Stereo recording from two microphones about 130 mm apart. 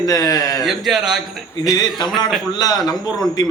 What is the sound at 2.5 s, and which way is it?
Speech, 30° left (ahead or behind).